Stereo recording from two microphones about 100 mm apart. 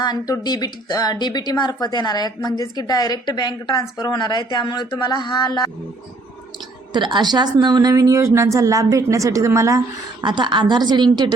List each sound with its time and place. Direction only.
0.0 s speech: 45° left (ahead or behind)
6.9 s a woman's voice: 50° right (ahead or behind); by 10.2 s 30° right (ahead or behind)
10.2 s a woman's voice: 50° right (ahead or behind)